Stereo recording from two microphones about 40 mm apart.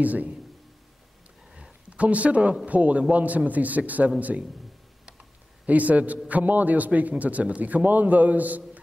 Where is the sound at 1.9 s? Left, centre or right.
Right.